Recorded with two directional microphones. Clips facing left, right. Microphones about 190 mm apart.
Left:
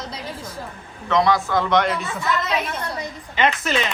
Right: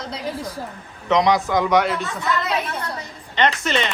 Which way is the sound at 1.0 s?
20° right (ahead or behind).